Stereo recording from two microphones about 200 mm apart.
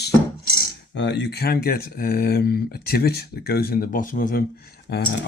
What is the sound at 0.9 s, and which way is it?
Speech, 60° left (ahead or behind).